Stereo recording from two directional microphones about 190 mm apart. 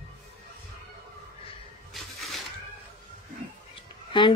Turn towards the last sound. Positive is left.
turn(degrees=25)  # may be behind; listen again after turning